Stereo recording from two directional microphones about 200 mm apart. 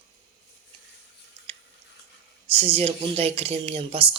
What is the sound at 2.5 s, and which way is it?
Speech, 30° right (ahead or behind).